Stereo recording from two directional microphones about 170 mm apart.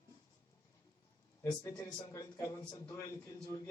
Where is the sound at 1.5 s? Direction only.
20° left (ahead or behind).